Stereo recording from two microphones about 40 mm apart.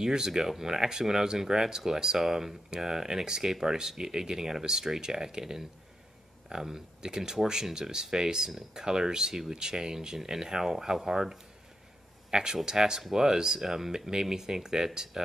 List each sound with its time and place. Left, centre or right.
0.0 s speech: centre